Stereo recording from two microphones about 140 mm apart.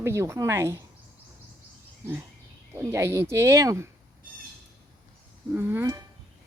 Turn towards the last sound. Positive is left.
turn(degrees=-15)  # may be behind; listen again after turning